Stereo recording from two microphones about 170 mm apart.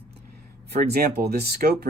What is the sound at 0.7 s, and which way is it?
Speech, 65° right (ahead or behind).